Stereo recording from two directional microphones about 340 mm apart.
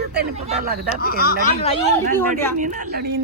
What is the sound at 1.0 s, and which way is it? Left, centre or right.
Speech, left.